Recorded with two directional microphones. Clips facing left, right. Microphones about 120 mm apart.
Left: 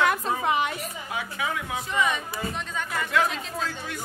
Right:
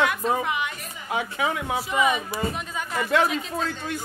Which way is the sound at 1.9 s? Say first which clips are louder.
Right 3 dB; 5° right (ahead or behind).